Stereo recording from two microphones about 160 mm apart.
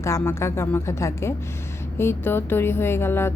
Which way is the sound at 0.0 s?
15° left (ahead or behind).